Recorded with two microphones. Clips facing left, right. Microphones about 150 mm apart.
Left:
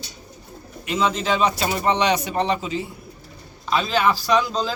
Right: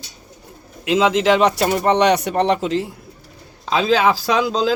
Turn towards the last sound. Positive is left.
turn(degrees=-90)